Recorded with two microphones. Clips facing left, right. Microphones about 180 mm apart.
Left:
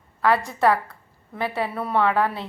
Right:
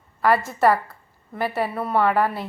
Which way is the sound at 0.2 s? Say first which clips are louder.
Right 1 dB; 5° right (ahead or behind).